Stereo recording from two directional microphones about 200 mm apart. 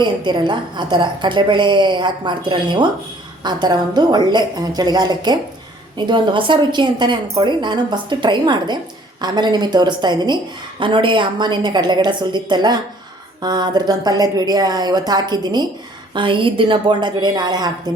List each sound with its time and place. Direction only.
0.0 s a woman's voice: 25° right (ahead or behind)